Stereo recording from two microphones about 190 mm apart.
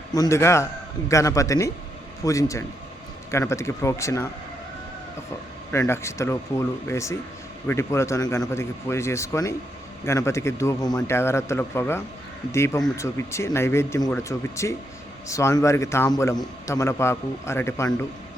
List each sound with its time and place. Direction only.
0.1 s speech: 20° left (ahead or behind)
5.7 s speech: 15° left (ahead or behind)